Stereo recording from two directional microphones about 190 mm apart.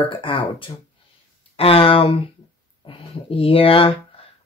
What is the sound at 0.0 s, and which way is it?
Speech, 25° left (ahead or behind).